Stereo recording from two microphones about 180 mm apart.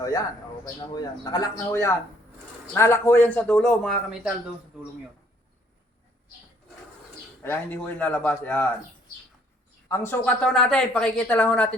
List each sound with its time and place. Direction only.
0.0 s speech: 20° left (ahead or behind); by 4.3 s centre (ahead or behind)
7.4 s speech: 10° left (ahead or behind)
9.9 s speech: 10° left (ahead or behind)